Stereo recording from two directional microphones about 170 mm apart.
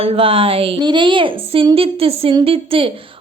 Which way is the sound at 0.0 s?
35° right (ahead or behind).